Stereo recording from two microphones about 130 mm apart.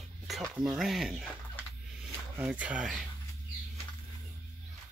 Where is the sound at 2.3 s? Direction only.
15° right (ahead or behind).